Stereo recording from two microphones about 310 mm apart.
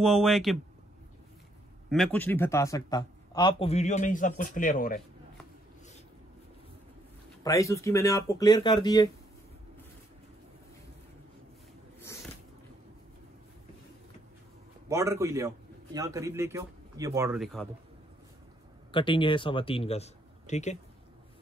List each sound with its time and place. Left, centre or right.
0.0 s speech: centre
1.9 s a man's voice: centre; by 5.0 s left
7.4 s a man's voice: centre
12.0 s a sound: centre
14.9 s a man's voice: centre
18.9 s a man's voice: centre